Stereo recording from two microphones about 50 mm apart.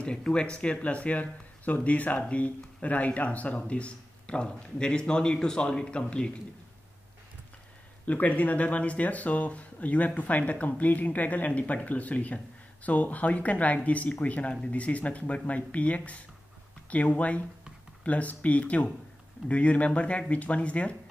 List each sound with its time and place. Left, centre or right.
0.0 s speech: centre
8.0 s speech: left